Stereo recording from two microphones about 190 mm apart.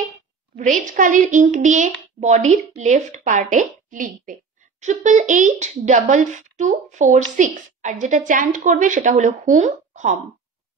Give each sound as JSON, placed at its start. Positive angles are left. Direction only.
{"t": 0.6, "sound": "speech", "side_deg": -40}